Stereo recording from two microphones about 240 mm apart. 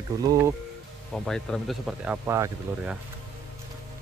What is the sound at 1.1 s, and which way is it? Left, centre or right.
Speech, centre.